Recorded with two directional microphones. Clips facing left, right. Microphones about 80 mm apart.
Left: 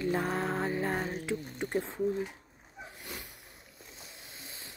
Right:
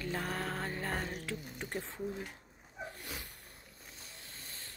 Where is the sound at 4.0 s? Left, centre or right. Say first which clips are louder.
Left 3 dB; centre.